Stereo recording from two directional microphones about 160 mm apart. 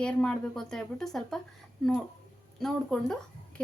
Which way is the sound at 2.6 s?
Centre (ahead or behind).